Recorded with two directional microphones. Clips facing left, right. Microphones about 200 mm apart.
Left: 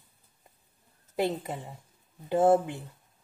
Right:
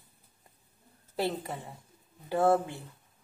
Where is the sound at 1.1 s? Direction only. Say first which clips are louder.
Left 3 dB; 20° left (ahead or behind).